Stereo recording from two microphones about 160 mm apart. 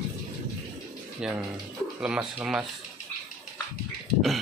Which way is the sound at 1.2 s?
5° right (ahead or behind).